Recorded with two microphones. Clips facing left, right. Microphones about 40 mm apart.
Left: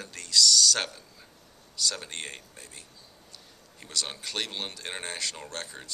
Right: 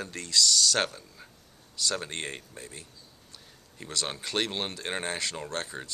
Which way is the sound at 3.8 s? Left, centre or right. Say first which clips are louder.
Right 1 dB; right.